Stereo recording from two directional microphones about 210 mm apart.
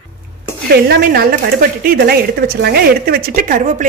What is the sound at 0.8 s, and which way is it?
A woman's voice, 45° right (ahead or behind).